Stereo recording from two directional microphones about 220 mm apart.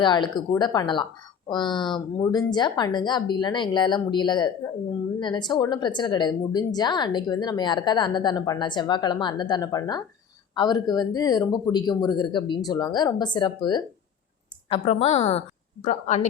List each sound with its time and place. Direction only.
0.0 s a woman's voice: 20° left (ahead or behind)